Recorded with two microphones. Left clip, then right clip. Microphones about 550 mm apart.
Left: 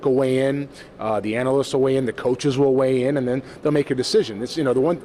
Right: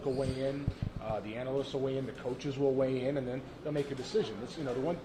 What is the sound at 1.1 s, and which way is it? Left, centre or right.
Speech, left.